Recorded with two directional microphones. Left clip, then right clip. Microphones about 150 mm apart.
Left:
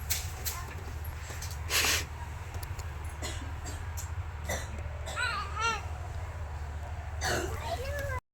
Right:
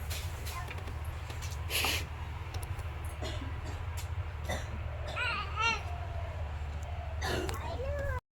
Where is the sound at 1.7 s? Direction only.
Centre (ahead or behind).